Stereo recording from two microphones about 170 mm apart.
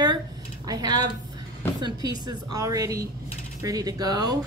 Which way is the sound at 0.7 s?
25° right (ahead or behind).